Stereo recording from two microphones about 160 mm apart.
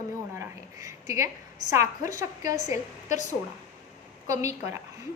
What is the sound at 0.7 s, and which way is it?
A woman's voice, 20° right (ahead or behind).